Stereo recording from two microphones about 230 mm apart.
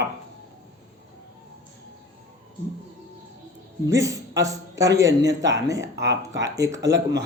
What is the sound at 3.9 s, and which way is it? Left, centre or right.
A man's voice, centre.